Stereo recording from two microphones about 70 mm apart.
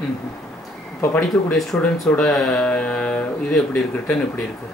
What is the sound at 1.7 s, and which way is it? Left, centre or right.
Speech, left.